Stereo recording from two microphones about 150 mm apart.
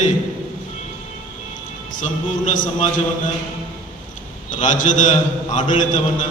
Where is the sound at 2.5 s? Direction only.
60° left (ahead or behind).